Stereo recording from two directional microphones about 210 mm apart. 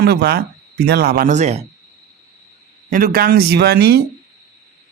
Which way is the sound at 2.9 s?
45° right (ahead or behind).